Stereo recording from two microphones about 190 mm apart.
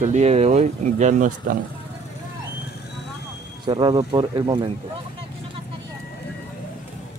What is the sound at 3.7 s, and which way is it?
Speech, 25° right (ahead or behind).